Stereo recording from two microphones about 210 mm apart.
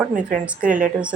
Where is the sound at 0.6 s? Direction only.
40° right (ahead or behind).